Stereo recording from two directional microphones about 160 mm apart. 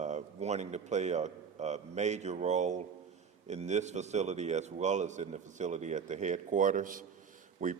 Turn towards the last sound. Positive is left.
turn(degrees=-55)  # may be behind; listen again after turning